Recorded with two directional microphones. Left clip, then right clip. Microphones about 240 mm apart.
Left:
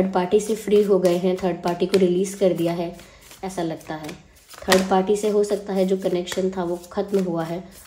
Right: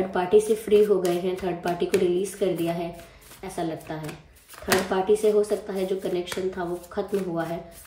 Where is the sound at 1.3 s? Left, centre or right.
Left.